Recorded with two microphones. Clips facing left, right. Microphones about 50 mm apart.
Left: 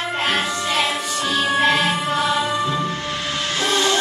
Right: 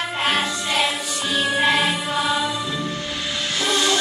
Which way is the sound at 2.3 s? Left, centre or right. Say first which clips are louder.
Left 3 dB; left.